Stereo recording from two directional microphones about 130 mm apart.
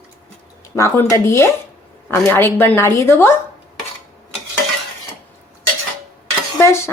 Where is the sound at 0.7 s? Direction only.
20° left (ahead or behind).